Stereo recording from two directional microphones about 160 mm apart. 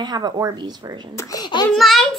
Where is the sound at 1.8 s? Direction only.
Centre (ahead or behind).